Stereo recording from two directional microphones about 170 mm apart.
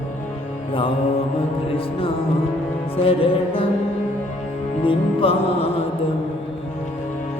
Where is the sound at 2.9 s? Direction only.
30° left (ahead or behind).